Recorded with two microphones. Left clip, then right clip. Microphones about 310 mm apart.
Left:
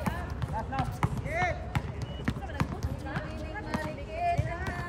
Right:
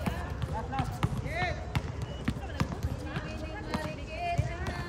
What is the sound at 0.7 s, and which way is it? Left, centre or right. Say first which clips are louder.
Basketball bounce: left 2 dB; centre.